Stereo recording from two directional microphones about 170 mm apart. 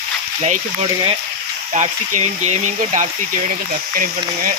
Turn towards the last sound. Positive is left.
turn(degrees=-45)  # may be behind; listen again after turning